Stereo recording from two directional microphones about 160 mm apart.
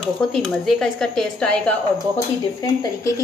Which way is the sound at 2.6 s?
20° left (ahead or behind).